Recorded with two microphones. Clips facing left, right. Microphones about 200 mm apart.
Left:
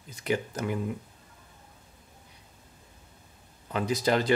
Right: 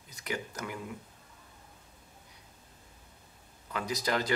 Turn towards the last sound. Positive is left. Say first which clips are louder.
# left 6 dB
turn(degrees=30)  # may be behind; listen again after turning